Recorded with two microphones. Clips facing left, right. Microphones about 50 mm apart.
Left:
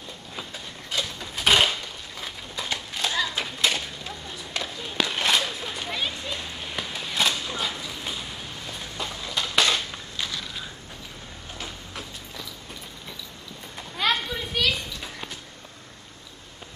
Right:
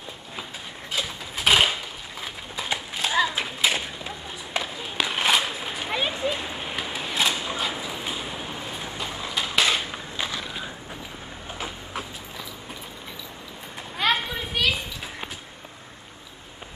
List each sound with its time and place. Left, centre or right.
0.9 s a sound: centre
11.5 s train: centre
13.9 s children playing: centre